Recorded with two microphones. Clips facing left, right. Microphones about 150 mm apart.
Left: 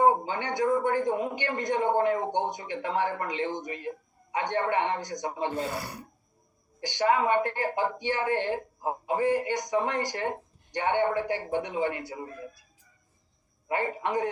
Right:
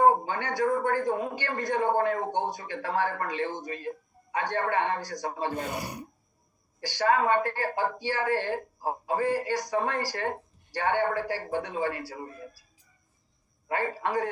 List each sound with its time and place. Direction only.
0.0 s speech: 20° left (ahead or behind)
5.5 s speech: 20° right (ahead or behind)
6.7 s speech: 20° left (ahead or behind)
13.7 s speech: 20° left (ahead or behind)